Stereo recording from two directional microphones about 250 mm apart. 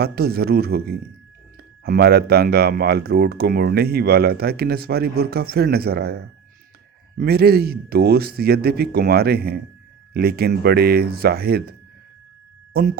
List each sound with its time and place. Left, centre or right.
0.0 s speech: right